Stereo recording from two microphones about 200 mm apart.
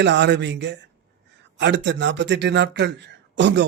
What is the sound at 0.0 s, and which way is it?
Speech, 60° right (ahead or behind).